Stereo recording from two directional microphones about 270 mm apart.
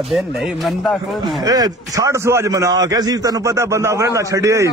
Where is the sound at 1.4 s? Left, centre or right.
Centre.